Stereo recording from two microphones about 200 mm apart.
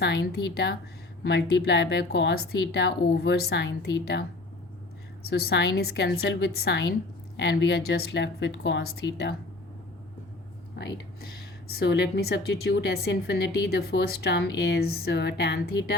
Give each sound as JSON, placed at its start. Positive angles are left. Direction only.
{"t": 0.0, "sound": "speech", "side_deg": 60}
{"t": 5.2, "sound": "a woman's voice", "side_deg": 55}
{"t": 10.8, "sound": "speech", "side_deg": 50}